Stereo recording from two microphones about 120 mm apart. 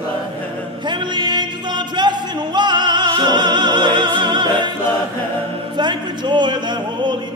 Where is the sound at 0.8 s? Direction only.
40° right (ahead or behind).